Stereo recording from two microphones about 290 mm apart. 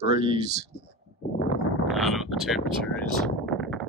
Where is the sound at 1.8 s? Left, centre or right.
Centre.